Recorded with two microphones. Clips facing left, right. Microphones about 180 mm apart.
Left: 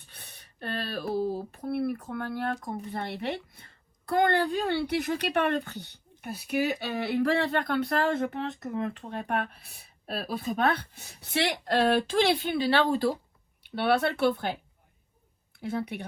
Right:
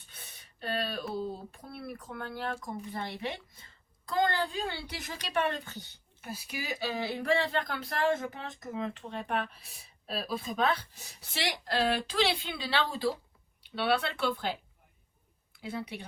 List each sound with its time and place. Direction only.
0.1 s a sound: 60° left (ahead or behind)
1.1 s speech: 60° left (ahead or behind)
15.6 s speech: 55° left (ahead or behind)